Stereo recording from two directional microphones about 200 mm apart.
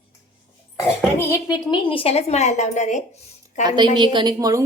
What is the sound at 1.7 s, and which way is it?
Speech, 25° left (ahead or behind).